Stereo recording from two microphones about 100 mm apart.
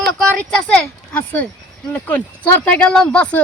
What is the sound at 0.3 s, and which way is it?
Speech, 10° left (ahead or behind).